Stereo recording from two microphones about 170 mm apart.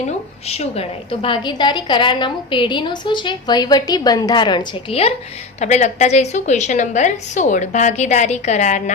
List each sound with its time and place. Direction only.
0.0 s a woman's voice: 40° left (ahead or behind)